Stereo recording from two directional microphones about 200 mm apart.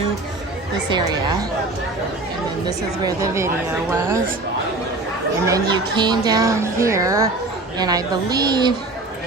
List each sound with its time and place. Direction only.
0.9 s a woman's voice: 20° right (ahead or behind)
2.6 s speech: 20° right (ahead or behind)
5.5 s a woman's voice: 20° right (ahead or behind)